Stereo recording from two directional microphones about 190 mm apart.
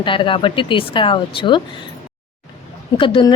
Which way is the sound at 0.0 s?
25° left (ahead or behind).